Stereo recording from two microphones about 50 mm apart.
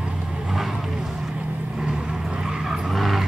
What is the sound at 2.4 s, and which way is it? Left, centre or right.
Vehicle, centre.